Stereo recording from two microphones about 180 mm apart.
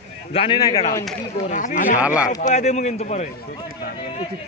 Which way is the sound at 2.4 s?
40° left (ahead or behind).